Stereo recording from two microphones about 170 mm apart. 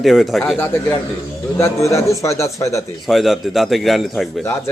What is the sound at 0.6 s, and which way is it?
Speech, 15° left (ahead or behind).